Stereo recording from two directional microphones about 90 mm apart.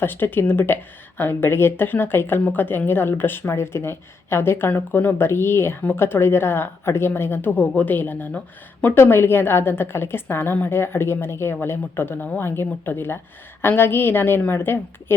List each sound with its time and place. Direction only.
0.0 s speech: 20° left (ahead or behind)